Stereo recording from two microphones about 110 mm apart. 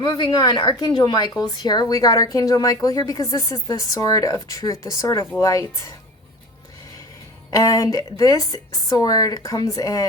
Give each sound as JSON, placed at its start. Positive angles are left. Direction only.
{"t": 0.0, "sound": "a woman's voice", "side_deg": 40}
{"t": 7.5, "sound": "a woman's voice", "side_deg": 30}